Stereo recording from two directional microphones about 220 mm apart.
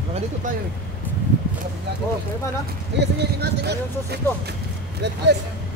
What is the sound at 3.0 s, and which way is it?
Speech, 45° right (ahead or behind).